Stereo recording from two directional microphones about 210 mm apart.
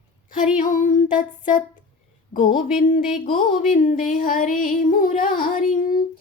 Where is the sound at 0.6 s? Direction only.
40° left (ahead or behind).